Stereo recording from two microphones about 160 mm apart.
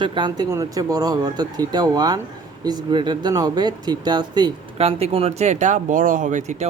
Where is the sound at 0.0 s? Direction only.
30° right (ahead or behind).